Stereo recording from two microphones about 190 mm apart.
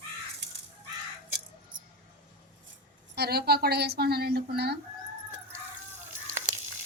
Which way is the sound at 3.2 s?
55° right (ahead or behind).